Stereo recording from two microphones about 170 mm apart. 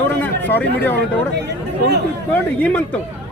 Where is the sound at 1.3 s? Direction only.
80° right.